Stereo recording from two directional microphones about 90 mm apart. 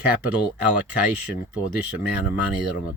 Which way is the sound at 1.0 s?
10° right (ahead or behind).